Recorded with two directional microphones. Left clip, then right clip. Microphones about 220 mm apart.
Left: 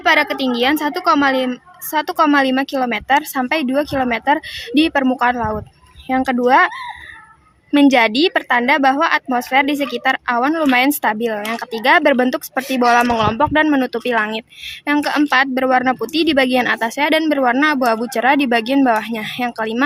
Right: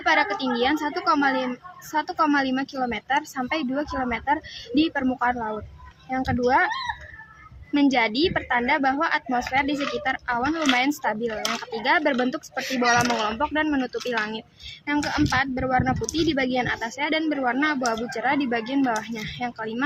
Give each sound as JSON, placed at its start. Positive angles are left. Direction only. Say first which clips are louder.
{"t": 0.0, "sound": "speech", "louder": "left 7 dB", "side_deg": 50}
{"t": 7.7, "sound": "speech", "louder": "left 9 dB", "side_deg": 45}